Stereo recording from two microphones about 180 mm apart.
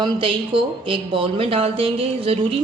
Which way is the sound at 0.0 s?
30° right (ahead or behind).